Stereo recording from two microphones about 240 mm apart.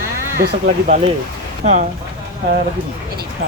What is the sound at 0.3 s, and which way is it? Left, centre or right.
Speech, right.